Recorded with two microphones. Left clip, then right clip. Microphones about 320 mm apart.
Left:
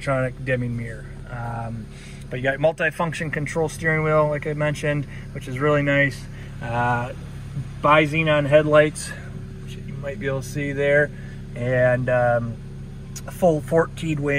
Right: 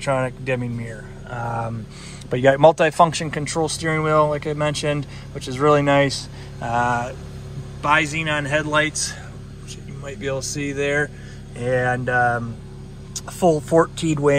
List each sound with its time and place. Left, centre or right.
0.0 s speech: centre
2.3 s speech: right
2.8 s speech: centre
6.6 s speech: centre
10.6 s speech: centre
13.4 s speech: centre